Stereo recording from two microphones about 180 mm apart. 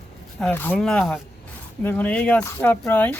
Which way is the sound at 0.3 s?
5° left (ahead or behind).